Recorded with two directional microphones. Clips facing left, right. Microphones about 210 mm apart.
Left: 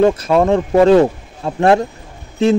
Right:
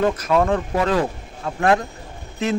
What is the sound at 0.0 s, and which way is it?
Speech, 30° left (ahead or behind).